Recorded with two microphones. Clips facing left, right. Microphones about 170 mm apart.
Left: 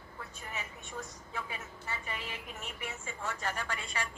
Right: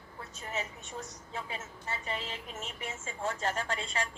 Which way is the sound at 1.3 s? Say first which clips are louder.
Right 2 dB; 30° right (ahead or behind).